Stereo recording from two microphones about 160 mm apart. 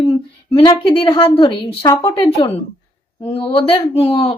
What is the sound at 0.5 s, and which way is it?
Speech, 30° left (ahead or behind).